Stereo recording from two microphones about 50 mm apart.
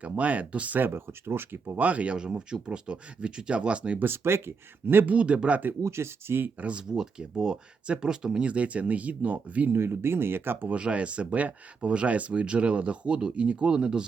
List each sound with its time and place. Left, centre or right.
0.0 s speech: right
0.8 s speech: right
1.7 s speech: right
2.1 s speech: centre
4.0 s speech: right
5.0 s speech: right
5.8 s speech: right
6.6 s speech: right
6.8 s speech: centre
8.4 s speech: right
9.7 s speech: right
10.7 s speech: right